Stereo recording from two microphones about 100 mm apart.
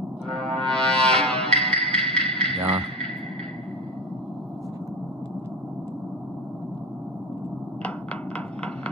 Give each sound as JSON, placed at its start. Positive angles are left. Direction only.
{"t": 0.3, "sound": "music", "side_deg": 10}
{"t": 1.3, "sound": "music", "side_deg": -80}
{"t": 1.9, "sound": "music", "side_deg": 10}
{"t": 2.2, "sound": "music", "side_deg": -85}